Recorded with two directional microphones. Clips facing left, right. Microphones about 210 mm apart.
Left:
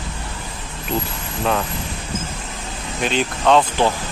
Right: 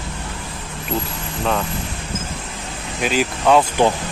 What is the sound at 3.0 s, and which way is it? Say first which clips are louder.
Speech: right 1 dB; 5° right (ahead or behind).